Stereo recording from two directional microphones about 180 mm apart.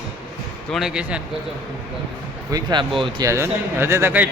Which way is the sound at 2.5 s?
20° right (ahead or behind).